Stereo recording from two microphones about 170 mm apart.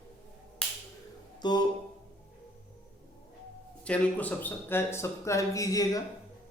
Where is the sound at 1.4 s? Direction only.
25° left (ahead or behind).